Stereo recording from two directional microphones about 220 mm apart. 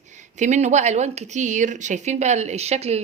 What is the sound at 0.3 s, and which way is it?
Speech, 35° right (ahead or behind).